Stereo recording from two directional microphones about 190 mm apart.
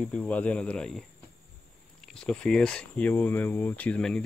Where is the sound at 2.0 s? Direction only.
5° left (ahead or behind).